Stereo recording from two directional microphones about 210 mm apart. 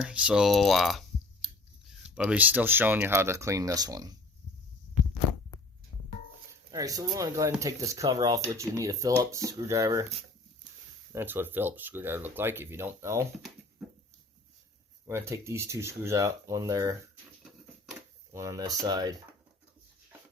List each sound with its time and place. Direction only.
0.0 s speech: 5° right (ahead or behind)
6.7 s speech: 15° right (ahead or behind)
11.1 s speech: 10° right (ahead or behind)
15.0 s speech: 15° right (ahead or behind)
18.3 s speech: 15° right (ahead or behind)